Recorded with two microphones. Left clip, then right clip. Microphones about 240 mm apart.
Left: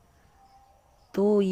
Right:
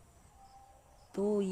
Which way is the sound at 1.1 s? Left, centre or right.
Left.